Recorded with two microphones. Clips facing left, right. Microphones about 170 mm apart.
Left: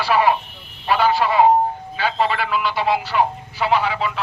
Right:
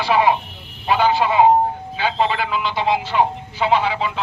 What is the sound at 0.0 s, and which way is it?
Speech, 20° right (ahead or behind).